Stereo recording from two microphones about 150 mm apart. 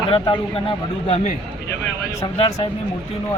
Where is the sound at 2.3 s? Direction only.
40° left (ahead or behind).